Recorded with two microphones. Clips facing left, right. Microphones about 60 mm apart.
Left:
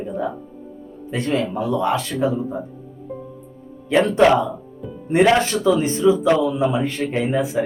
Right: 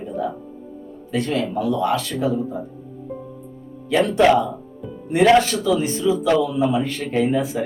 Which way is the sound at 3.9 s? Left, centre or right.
Left.